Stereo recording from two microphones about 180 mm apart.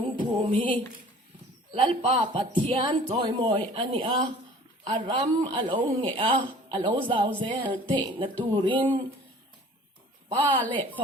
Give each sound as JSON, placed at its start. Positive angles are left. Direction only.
{"t": 0.0, "sound": "music", "side_deg": -30}
{"t": 1.7, "sound": "speech", "side_deg": -30}
{"t": 10.2, "sound": "speech", "side_deg": -30}